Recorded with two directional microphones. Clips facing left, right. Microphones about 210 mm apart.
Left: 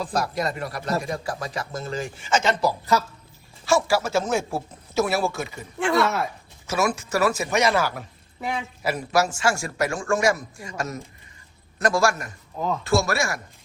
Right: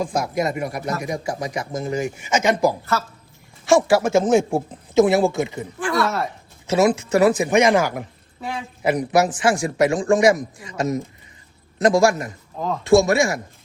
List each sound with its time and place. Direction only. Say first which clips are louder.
0.0 s speech: right 4 dB; 15° right (ahead or behind)
3.7 s speech: right 6 dB; 15° right (ahead or behind)
6.0 s speech: right 2 dB; centre (ahead or behind)
6.7 s a man's voice: right 7 dB; 20° right (ahead or behind)
12.5 s speech: right 1 dB; centre (ahead or behind)
12.8 s a man's voice: right 9 dB; 20° right (ahead or behind)